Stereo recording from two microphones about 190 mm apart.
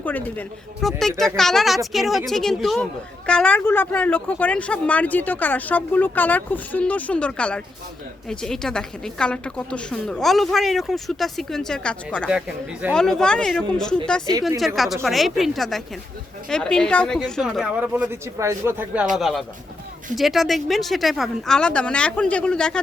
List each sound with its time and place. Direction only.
0.0 s a woman's voice: 10° left (ahead or behind)
14.3 s a woman's voice: 25° right (ahead or behind)
15.0 s a woman's voice: centre (ahead or behind)
19.1 s a woman's voice: centre (ahead or behind)